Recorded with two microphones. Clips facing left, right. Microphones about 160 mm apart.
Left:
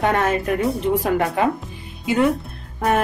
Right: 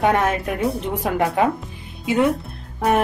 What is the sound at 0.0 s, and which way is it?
Speech, centre (ahead or behind).